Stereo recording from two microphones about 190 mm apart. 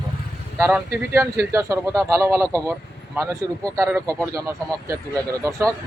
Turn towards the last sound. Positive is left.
turn(degrees=-15)  # may be behind; listen again after turning